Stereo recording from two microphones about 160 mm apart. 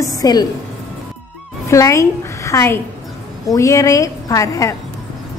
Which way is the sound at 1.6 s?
20° left (ahead or behind).